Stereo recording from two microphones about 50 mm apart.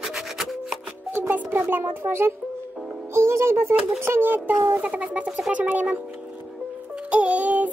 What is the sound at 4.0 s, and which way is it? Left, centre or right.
Speech, right.